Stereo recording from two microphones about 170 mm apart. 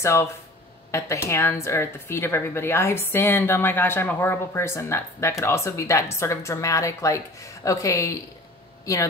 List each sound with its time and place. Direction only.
0.0 s speech: 15° left (ahead or behind)